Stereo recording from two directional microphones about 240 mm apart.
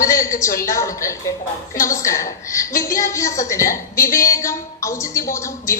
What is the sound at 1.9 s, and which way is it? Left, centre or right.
A woman's voice, centre.